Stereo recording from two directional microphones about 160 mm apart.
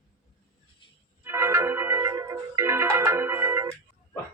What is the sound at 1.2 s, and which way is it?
Music, 15° right (ahead or behind).